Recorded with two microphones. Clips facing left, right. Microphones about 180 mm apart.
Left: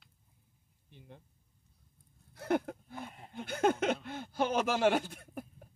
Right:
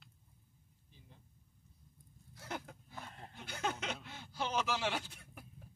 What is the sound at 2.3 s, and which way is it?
Speech, 60° left (ahead or behind).